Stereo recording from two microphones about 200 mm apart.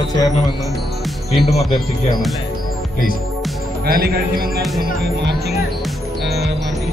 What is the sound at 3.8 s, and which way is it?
Speech, 50° right (ahead or behind).